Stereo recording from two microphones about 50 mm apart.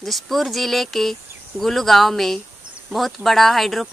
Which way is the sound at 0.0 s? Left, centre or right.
Centre.